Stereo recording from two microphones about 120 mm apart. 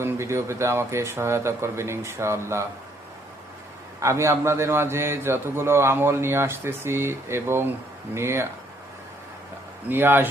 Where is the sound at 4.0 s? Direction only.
25° right (ahead or behind).